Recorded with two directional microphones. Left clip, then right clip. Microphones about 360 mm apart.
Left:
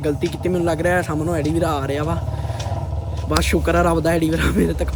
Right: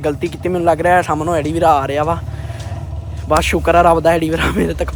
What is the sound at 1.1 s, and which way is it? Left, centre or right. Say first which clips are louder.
Speech: right 6 dB; right.